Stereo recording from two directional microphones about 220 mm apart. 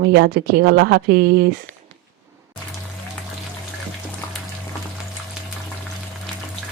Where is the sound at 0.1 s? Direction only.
50° right (ahead or behind).